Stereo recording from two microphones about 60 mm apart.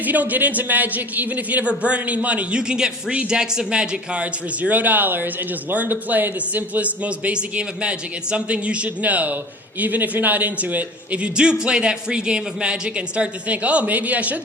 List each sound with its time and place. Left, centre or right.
0.0 s a man's voice: right